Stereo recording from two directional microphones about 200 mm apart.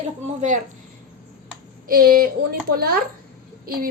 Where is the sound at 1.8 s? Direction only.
45° right (ahead or behind).